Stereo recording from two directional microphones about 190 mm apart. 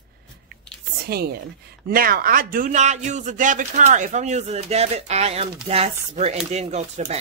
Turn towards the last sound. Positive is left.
turn(degrees=-35)  # may be behind; listen again after turning